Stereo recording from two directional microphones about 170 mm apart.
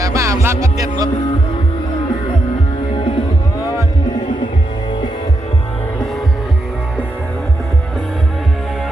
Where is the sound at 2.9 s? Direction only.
30° left (ahead or behind).